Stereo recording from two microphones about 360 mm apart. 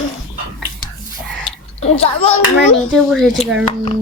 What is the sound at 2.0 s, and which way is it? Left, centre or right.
Speech, centre.